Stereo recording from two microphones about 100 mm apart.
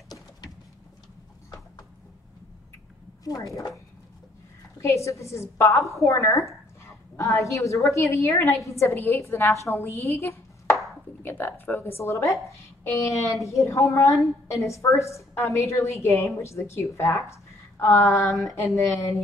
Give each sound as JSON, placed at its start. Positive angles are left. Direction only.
{"t": 3.3, "sound": "a woman's voice", "side_deg": 35}